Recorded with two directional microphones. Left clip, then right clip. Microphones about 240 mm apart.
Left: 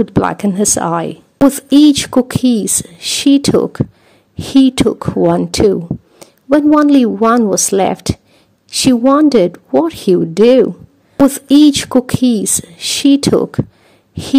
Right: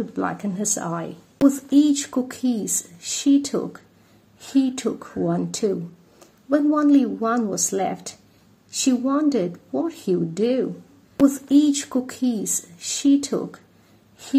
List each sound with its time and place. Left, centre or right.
0.2 s speech: left